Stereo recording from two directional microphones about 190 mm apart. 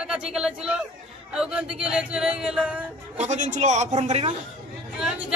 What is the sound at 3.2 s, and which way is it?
A man's voice, 40° right (ahead or behind).